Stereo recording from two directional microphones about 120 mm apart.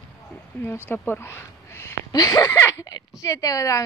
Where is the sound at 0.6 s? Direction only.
20° left (ahead or behind).